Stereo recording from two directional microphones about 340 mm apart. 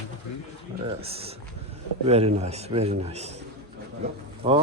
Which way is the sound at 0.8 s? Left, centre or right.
Centre.